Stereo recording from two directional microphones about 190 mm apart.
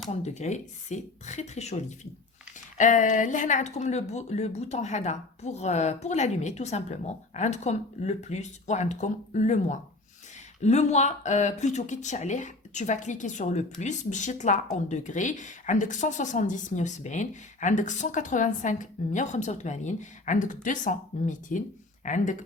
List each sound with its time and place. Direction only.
0.1 s speech: 35° left (ahead or behind)
2.7 s speech: 40° left (ahead or behind)